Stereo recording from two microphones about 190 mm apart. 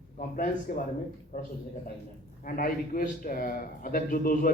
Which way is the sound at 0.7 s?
50° left (ahead or behind).